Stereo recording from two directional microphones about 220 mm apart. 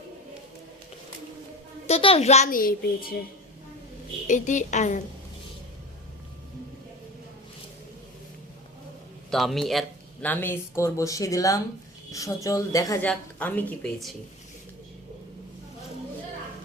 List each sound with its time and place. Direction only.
1.9 s a woman's voice: 25° left (ahead or behind); by 3.2 s 40° left (ahead or behind)
4.3 s a woman's voice: 35° left (ahead or behind)
9.3 s speech: centre (ahead or behind)